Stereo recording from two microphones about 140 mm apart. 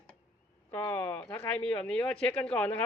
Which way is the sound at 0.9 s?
15° left (ahead or behind).